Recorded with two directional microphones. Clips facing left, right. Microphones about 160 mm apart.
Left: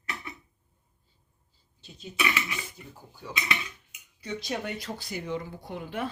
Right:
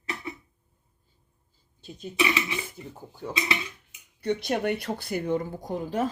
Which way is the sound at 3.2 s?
45° right (ahead or behind).